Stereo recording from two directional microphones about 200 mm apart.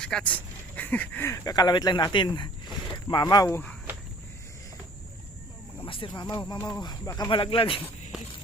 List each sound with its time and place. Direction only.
0.0 s speech: 5° left (ahead or behind)
5.8 s speech: 25° left (ahead or behind)